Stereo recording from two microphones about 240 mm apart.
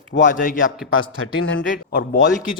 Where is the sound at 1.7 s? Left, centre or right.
Left.